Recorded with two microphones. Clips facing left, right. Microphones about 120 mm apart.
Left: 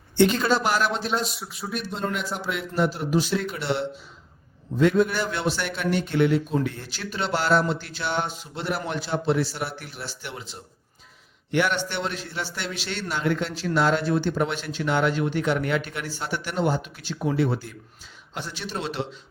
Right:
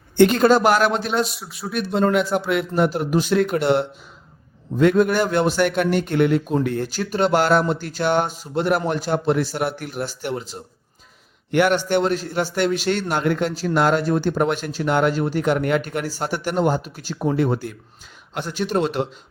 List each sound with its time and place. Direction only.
0.2 s a man's voice: 55° right (ahead or behind)
11.5 s a man's voice: 50° right (ahead or behind)